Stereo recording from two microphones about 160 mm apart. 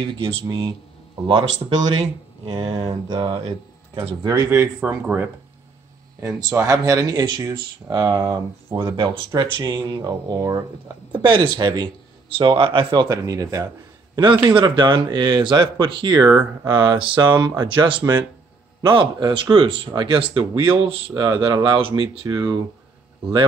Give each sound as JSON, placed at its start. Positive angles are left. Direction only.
{"t": 0.0, "sound": "speech", "side_deg": -30}
{"t": 2.4, "sound": "speech", "side_deg": -30}
{"t": 4.3, "sound": "speech", "side_deg": -15}
{"t": 8.9, "sound": "speech", "side_deg": -35}